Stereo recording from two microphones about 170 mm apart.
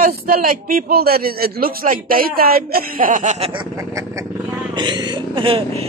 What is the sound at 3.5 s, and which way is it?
Speech, 25° right (ahead or behind).